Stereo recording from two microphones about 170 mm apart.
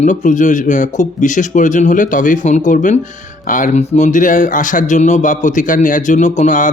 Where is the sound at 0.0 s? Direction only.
50° left (ahead or behind).